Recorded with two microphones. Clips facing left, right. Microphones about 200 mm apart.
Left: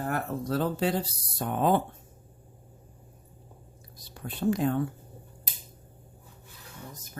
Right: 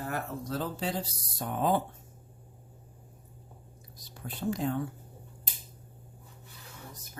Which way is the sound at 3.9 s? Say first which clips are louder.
Left 4 dB; 65° left (ahead or behind).